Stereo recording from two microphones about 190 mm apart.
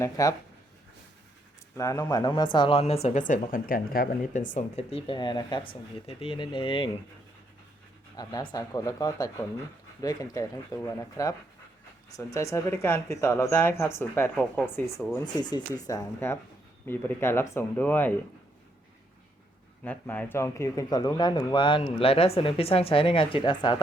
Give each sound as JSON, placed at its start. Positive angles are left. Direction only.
{"t": 0.0, "sound": "speech", "side_deg": 20}
{"t": 1.7, "sound": "speech", "side_deg": 15}
{"t": 8.1, "sound": "speech", "side_deg": 20}
{"t": 15.2, "sound": "speech", "side_deg": 20}
{"t": 19.8, "sound": "speech", "side_deg": 10}